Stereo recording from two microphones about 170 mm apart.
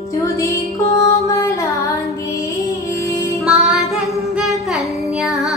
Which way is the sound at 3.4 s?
5° right (ahead or behind).